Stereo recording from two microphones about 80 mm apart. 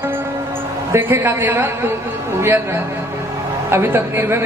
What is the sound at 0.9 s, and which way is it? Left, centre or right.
A man's voice, right.